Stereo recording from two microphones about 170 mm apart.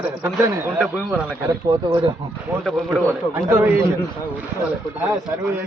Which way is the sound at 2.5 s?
10° right (ahead or behind).